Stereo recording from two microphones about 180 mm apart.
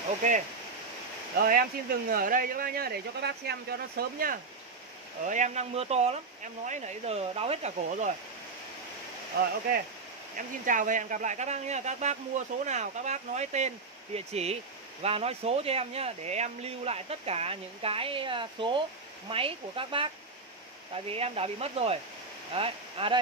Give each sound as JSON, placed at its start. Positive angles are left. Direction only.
{"t": 1.4, "sound": "speech", "side_deg": -55}
{"t": 5.2, "sound": "speech", "side_deg": -45}
{"t": 9.3, "sound": "speech", "side_deg": -60}
{"t": 10.3, "sound": "speech", "side_deg": -45}